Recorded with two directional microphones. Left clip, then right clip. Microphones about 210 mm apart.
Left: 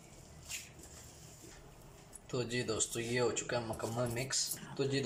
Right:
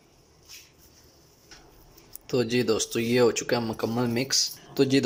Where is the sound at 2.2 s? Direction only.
45° right (ahead or behind).